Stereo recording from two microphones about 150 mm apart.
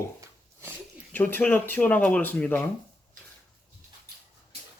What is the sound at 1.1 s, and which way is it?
Speech, 10° left (ahead or behind).